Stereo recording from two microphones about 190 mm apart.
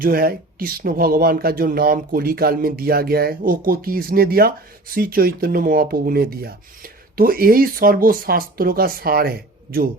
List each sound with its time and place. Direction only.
0.0 s speech: 50° right (ahead or behind)